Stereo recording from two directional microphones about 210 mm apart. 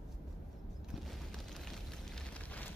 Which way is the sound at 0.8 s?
Centre (ahead or behind).